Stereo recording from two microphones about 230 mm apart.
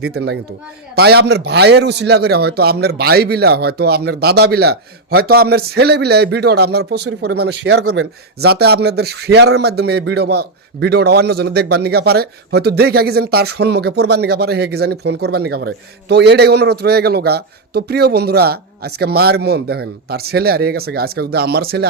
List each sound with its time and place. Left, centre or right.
0.0 s speech: right